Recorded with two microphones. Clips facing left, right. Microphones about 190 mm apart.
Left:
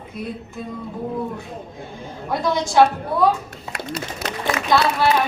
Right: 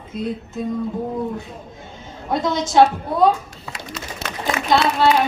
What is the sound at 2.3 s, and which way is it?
Speech, 20° right (ahead or behind).